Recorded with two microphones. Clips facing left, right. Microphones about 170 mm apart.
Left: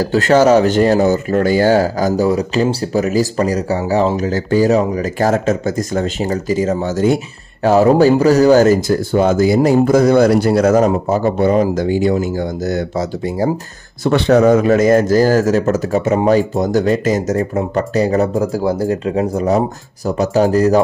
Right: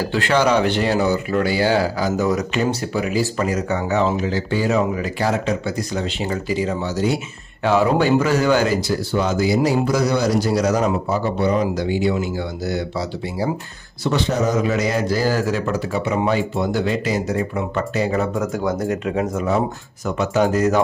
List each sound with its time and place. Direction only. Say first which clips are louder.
0.0 s speech: left 7 dB; 40° left (ahead or behind)
2.2 s speech: left 5 dB; 30° left (ahead or behind); by 13.5 s 45° left (ahead or behind)
14.0 s speech: left 9 dB; 65° left (ahead or behind); by 20.8 s 35° left (ahead or behind)